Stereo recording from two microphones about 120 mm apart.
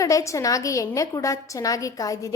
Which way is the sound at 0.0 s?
25° left (ahead or behind).